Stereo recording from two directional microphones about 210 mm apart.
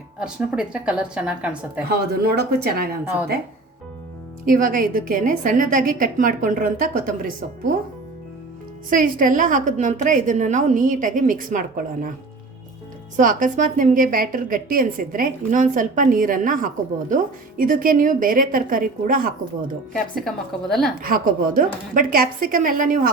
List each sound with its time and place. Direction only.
0.2 s a woman's voice: 5° right (ahead or behind)
1.9 s speech: 45° right (ahead or behind)
4.4 s a woman's voice: 40° right (ahead or behind)
8.9 s a woman's voice: 40° right (ahead or behind)
13.1 s a woman's voice: 40° right (ahead or behind)
19.9 s a woman's voice: centre (ahead or behind)
21.0 s a woman's voice: 45° right (ahead or behind)